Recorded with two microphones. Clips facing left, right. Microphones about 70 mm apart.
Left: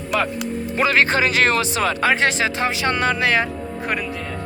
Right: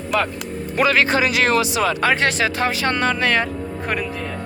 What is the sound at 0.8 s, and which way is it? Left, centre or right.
Speech, left.